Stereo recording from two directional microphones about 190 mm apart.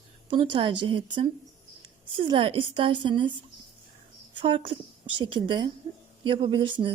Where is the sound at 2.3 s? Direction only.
30° right (ahead or behind).